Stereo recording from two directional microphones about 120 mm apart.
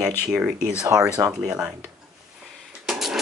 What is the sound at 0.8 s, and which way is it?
Speech, 20° right (ahead or behind).